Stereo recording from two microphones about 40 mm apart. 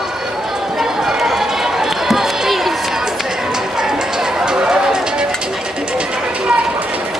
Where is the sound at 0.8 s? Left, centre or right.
Centre.